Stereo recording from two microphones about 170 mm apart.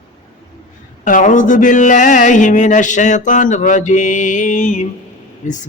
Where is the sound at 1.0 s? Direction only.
50° left (ahead or behind).